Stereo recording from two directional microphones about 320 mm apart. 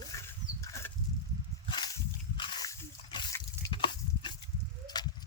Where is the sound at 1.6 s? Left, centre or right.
Centre.